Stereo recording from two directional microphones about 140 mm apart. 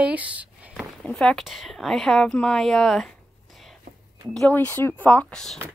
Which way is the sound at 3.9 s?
90° right.